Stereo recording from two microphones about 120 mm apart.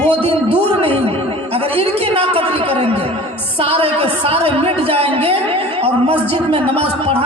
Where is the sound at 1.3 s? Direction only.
55° right (ahead or behind).